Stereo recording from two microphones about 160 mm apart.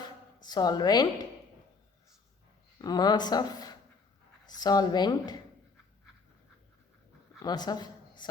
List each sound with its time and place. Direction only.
0.4 s speech: 25° left (ahead or behind)
2.7 s speech: 25° left (ahead or behind)
7.4 s a woman's voice: 25° left (ahead or behind)